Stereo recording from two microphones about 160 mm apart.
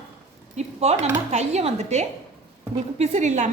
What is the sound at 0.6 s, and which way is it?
A woman's voice, 45° right (ahead or behind).